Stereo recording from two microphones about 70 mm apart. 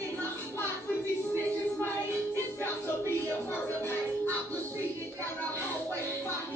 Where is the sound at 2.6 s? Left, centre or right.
Left.